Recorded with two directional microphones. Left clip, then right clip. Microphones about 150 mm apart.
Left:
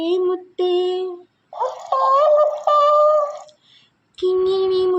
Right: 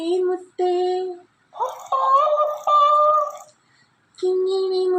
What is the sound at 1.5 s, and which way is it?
Speech, 5° right (ahead or behind).